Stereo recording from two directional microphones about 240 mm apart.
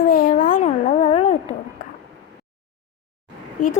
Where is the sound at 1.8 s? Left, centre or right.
Left.